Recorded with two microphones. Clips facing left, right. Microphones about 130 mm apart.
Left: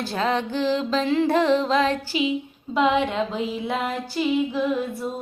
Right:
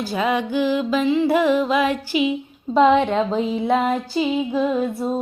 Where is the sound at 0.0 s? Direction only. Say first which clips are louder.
Right 3 dB; 5° right (ahead or behind).